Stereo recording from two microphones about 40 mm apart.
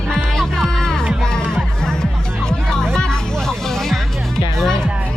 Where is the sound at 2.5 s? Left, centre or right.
Centre.